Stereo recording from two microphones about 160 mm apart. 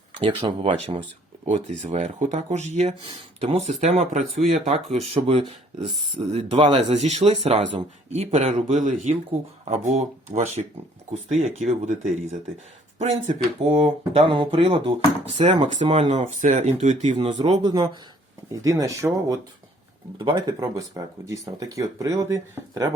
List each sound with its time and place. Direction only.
0.2 s speech: 35° right (ahead or behind)
15.4 s speech: 45° right (ahead or behind)
17.6 s speech: 25° right (ahead or behind)